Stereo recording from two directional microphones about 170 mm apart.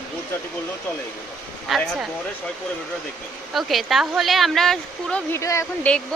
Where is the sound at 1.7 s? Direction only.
Centre (ahead or behind).